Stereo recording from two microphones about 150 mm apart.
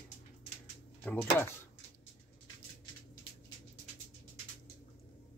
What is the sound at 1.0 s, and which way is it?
Speech, 10° left (ahead or behind).